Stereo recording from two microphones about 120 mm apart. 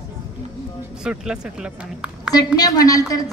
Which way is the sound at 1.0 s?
5° right (ahead or behind).